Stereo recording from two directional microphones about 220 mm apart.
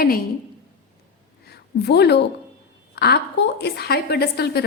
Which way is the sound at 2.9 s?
50° left (ahead or behind).